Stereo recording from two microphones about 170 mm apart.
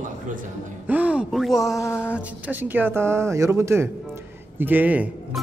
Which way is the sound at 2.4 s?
10° right (ahead or behind).